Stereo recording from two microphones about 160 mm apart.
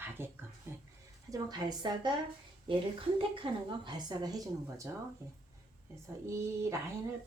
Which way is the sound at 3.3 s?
30° right (ahead or behind).